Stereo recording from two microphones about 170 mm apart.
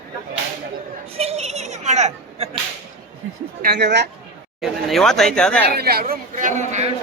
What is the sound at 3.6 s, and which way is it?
Speech, 60° right (ahead or behind).